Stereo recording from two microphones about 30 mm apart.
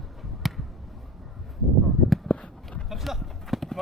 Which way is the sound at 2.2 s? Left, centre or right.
Left.